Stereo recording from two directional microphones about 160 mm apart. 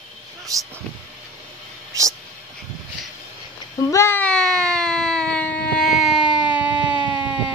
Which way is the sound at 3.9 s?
15° left (ahead or behind).